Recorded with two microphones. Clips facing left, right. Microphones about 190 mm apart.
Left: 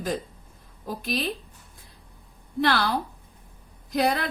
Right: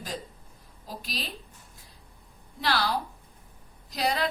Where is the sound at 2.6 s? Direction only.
55° left (ahead or behind).